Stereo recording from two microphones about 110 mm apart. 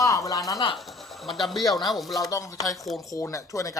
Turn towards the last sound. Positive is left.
turn(degrees=30)  # may be behind; listen again after turning